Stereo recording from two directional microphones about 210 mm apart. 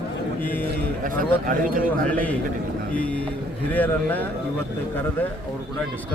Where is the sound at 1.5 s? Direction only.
40° right (ahead or behind).